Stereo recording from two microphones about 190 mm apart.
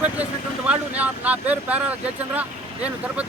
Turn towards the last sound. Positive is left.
turn(degrees=-5)  # may be behind; listen again after turning